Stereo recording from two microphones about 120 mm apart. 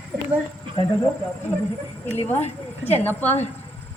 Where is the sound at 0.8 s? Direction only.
50° left (ahead or behind).